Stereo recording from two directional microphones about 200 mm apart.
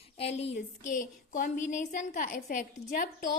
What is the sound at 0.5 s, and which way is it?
A woman's voice, 40° left (ahead or behind).